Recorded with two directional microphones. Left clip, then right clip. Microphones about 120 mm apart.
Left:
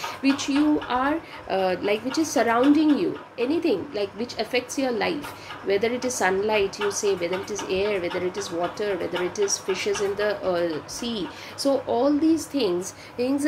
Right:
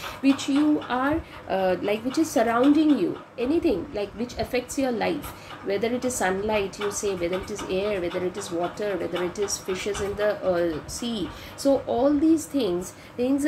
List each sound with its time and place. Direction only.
0.0 s a woman's voice: 15° right (ahead or behind)